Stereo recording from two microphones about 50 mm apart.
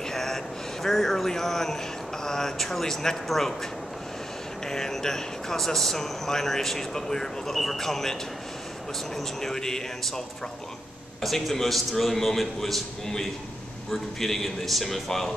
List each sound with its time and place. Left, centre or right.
0.1 s a sound: centre
0.8 s speech: centre
4.6 s a man's voice: centre